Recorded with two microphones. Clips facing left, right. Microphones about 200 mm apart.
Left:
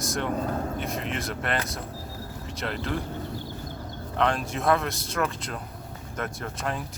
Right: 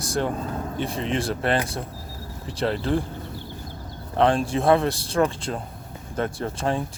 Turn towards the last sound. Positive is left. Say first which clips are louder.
# right 6 dB
turn(degrees=-30)  # may be behind; listen again after turning